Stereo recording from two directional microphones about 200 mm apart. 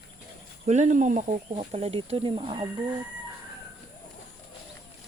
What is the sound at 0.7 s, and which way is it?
Speech, 35° right (ahead or behind).